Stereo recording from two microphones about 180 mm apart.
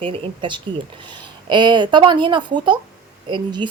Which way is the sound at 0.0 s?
30° right (ahead or behind).